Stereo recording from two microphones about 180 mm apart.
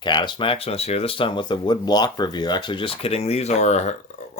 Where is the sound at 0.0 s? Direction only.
25° left (ahead or behind).